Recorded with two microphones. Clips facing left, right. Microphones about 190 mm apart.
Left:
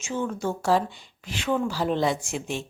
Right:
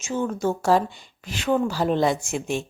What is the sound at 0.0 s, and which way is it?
Speech, 40° right (ahead or behind).